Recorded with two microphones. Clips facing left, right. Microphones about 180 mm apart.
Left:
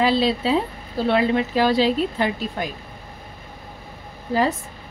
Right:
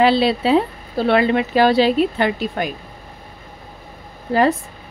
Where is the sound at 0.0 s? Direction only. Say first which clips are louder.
Right 4 dB; 65° right (ahead or behind).